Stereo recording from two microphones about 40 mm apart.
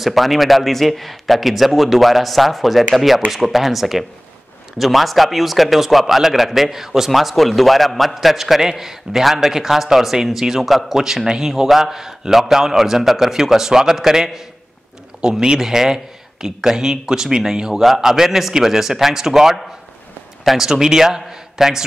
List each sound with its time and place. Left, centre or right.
0.0 s a man's voice: centre
7.1 s a man's voice: centre
11.0 s a man's voice: centre